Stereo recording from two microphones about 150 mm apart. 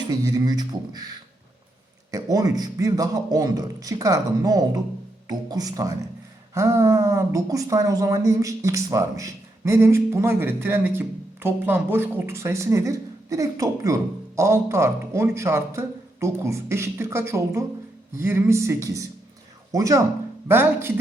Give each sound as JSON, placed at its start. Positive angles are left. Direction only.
{"t": 0.1, "sound": "a woman's voice", "side_deg": -25}